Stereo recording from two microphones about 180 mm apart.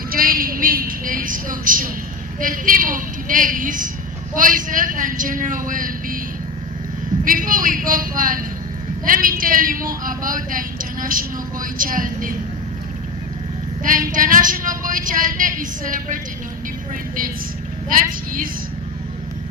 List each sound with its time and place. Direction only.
0.1 s a woman's voice: 50° right (ahead or behind)
7.3 s speech: 50° right (ahead or behind)
13.8 s speech: 50° right (ahead or behind)